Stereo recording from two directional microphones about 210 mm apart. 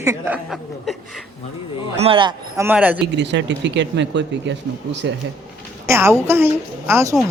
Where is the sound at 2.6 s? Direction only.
10° right (ahead or behind).